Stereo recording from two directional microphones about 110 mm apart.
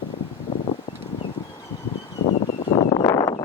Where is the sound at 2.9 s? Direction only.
35° left (ahead or behind).